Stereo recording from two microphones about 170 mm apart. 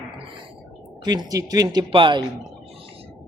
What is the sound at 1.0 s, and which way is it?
Speech, 25° right (ahead or behind).